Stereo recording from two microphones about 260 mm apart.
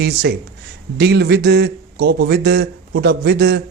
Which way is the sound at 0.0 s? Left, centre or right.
Right.